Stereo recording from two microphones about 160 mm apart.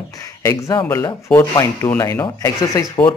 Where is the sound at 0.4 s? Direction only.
20° left (ahead or behind).